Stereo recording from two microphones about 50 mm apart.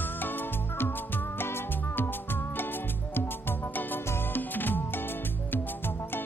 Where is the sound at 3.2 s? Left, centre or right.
Left.